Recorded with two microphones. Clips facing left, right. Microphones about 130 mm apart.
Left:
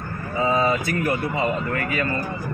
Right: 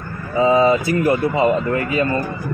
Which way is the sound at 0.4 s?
25° right (ahead or behind).